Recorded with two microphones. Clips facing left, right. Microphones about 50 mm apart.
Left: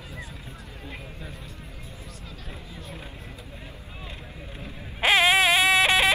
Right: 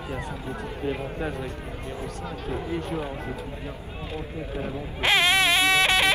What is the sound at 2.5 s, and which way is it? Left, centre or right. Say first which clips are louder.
Speech: right 14 dB; right.